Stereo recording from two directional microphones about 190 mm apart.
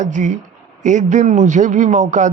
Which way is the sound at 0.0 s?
40° right (ahead or behind).